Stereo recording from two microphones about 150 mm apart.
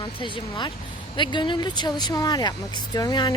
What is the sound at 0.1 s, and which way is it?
Speech, 35° left (ahead or behind).